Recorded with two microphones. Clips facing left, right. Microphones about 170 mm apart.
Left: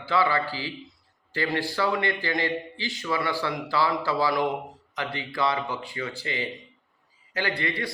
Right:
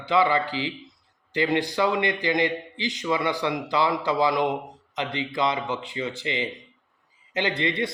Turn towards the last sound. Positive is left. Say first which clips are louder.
# right 4 dB
turn(degrees=-20)  # may be behind; listen again after turning